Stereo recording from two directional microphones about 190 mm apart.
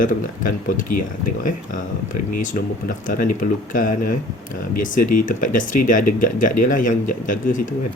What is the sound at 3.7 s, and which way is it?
Speech, 45° left (ahead or behind).